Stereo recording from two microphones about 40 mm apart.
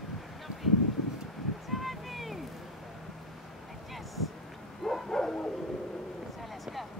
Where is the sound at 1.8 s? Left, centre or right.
Centre.